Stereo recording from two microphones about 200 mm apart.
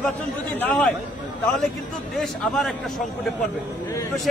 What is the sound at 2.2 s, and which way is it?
Speech, 5° left (ahead or behind).